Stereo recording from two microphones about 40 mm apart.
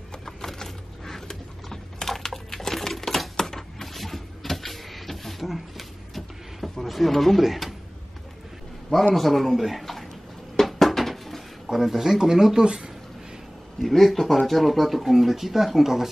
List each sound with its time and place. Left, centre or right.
0.2 s a sound: centre
9.1 s speech: centre
10.5 s dishes: centre
12.6 s speech: right
13.7 s speech: centre